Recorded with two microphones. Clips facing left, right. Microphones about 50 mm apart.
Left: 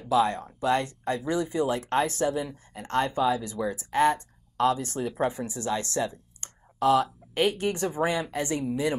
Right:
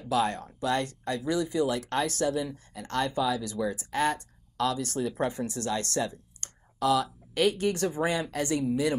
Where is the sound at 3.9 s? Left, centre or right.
Left.